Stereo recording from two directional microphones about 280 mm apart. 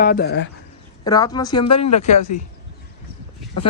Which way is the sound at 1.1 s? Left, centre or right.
Centre.